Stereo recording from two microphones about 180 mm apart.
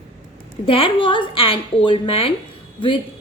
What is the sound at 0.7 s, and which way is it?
A woman's voice, 30° left (ahead or behind).